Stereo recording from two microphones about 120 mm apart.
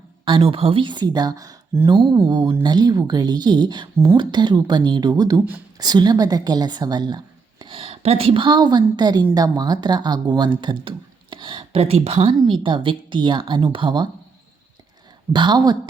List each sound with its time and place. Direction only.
0.3 s speech: 45° right (ahead or behind)
7.6 s a woman's voice: 50° right (ahead or behind)
15.3 s speech: 40° right (ahead or behind)